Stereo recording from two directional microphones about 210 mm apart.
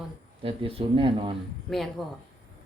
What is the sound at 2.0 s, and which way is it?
Speech, centre (ahead or behind).